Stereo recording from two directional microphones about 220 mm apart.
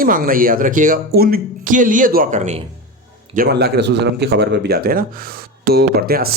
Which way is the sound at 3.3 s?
45° right (ahead or behind).